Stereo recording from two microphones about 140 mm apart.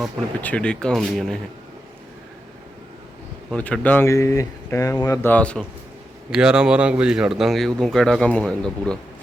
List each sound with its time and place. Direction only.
0.4 s speech: 10° left (ahead or behind)
3.5 s speech: 10° left (ahead or behind)
5.3 s a man's voice: 10° left (ahead or behind)
6.3 s speech: 5° right (ahead or behind)